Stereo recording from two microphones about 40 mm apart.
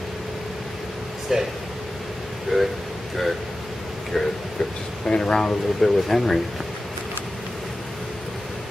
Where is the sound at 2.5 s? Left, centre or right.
Centre.